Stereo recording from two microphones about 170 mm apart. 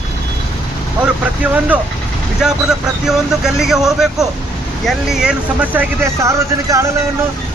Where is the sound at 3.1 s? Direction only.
Centre (ahead or behind).